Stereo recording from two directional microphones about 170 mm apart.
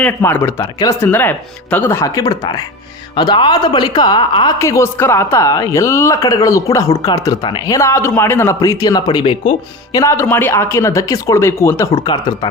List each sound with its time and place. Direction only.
0.0 s a woman's voice: 10° left (ahead or behind); by 10.0 s 30° left (ahead or behind)
10.0 s speech: 15° left (ahead or behind)
11.9 s a woman's voice: 30° left (ahead or behind)